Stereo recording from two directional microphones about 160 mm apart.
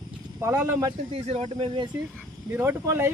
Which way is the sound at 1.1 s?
40° right (ahead or behind).